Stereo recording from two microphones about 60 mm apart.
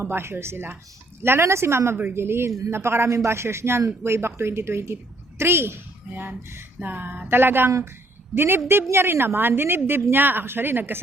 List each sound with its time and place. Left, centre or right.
0.0 s a woman's voice: right